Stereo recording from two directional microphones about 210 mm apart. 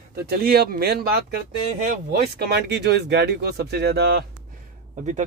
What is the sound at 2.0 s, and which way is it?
Speech, 50° right (ahead or behind).